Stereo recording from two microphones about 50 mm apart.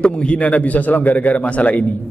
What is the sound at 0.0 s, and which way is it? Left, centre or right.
A man's voice, left.